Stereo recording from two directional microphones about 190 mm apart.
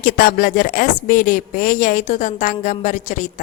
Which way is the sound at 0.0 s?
50° left (ahead or behind).